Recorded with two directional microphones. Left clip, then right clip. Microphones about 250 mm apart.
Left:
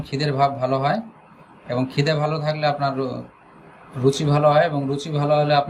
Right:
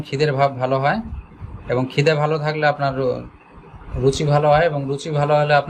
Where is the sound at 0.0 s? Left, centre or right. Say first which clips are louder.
Right 2 dB; centre.